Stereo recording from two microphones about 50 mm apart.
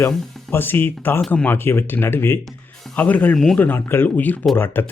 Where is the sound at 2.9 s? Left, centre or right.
Left.